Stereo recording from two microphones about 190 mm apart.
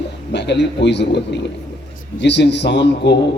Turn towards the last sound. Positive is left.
turn(degrees=65)  # may be behind; listen again after turning